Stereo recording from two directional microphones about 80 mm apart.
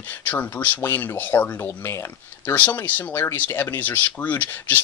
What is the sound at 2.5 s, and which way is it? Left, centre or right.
Speech, left.